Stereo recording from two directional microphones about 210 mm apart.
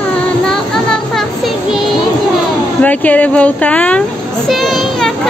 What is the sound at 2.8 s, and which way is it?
Children playing, 10° left (ahead or behind).